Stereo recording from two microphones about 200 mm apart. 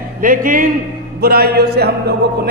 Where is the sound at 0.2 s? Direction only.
45° right (ahead or behind).